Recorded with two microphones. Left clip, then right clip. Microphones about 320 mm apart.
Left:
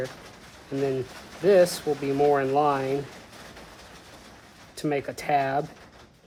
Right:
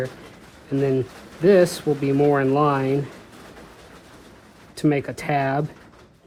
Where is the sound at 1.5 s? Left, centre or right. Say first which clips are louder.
Right 3 dB; centre.